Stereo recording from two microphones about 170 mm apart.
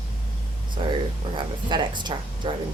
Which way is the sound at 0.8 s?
30° right (ahead or behind).